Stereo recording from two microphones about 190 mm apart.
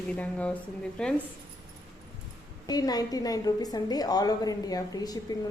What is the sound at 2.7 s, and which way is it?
A woman's voice, 20° left (ahead or behind).